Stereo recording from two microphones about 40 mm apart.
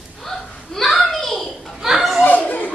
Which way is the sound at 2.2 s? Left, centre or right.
Left.